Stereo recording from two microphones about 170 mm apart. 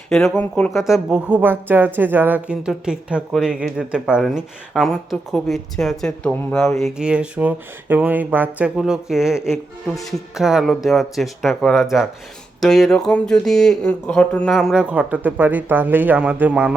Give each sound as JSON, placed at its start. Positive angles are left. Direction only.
{"t": 0.1, "sound": "speech", "side_deg": 0}
{"t": 0.9, "sound": "speech", "side_deg": -5}